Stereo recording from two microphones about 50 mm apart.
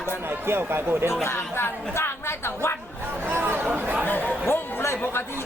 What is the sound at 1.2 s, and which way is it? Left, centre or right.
Speech, left.